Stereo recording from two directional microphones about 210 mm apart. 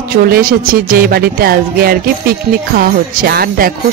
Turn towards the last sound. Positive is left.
turn(degrees=-45)  # may be behind; listen again after turning